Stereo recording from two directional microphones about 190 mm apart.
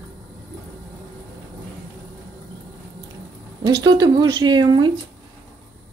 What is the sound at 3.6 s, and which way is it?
Speech, 20° right (ahead or behind).